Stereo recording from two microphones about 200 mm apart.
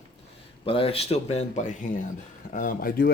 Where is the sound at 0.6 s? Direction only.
30° left (ahead or behind); by 3.1 s 45° left (ahead or behind).